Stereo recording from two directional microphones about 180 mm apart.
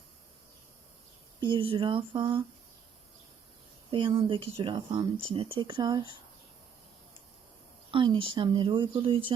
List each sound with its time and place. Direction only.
1.4 s speech: 25° right (ahead or behind)
3.9 s speech: 25° right (ahead or behind)
7.9 s speech: 25° right (ahead or behind)